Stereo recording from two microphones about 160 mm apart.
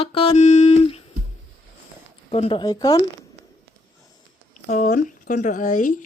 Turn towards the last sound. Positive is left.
turn(degrees=50)  # may be behind; listen again after turning